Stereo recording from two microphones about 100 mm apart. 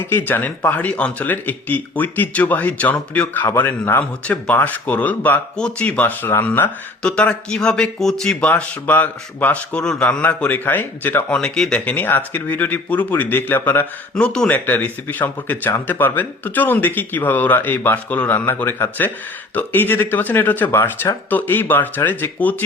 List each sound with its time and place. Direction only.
0.0 s speech: 20° left (ahead or behind)
11.3 s speech: 10° left (ahead or behind)
11.9 s speech: 20° left (ahead or behind)